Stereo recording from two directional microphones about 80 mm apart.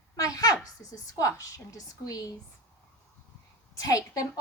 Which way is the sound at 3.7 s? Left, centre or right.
Left.